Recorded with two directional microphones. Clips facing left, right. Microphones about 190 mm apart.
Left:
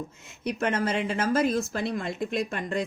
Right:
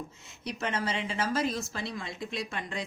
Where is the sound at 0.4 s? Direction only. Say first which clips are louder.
Left 6 dB; 50° left (ahead or behind).